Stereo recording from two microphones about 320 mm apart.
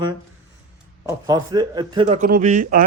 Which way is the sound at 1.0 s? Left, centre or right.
Centre.